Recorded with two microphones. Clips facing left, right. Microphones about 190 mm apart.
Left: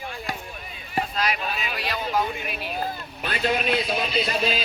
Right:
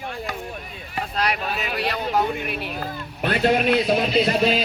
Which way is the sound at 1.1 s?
60° right (ahead or behind).